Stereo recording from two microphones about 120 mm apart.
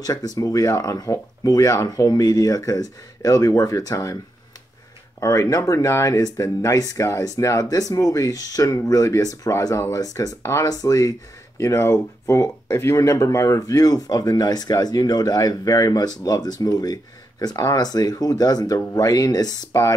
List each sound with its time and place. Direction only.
0.0 s speech: 30° left (ahead or behind)
5.2 s speech: 30° left (ahead or behind)